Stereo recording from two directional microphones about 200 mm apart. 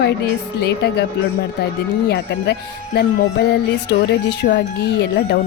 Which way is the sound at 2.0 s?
55° left (ahead or behind).